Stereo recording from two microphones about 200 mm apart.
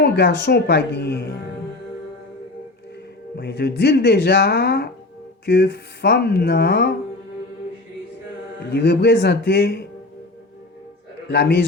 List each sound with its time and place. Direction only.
0.0 s speech: 55° left (ahead or behind)
3.3 s speech: 55° left (ahead or behind)
8.7 s speech: 55° left (ahead or behind)
11.3 s speech: 55° left (ahead or behind)